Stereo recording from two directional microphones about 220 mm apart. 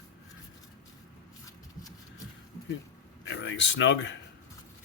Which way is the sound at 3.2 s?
55° left (ahead or behind).